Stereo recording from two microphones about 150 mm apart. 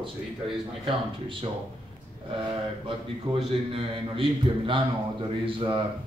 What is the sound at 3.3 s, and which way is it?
A man's voice, 25° right (ahead or behind).